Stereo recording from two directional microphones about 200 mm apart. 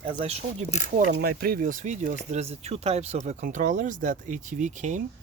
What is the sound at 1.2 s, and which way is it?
Speech, 50° right (ahead or behind).